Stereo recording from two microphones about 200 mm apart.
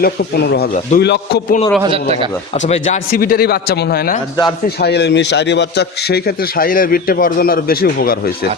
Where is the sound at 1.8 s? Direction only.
25° right (ahead or behind).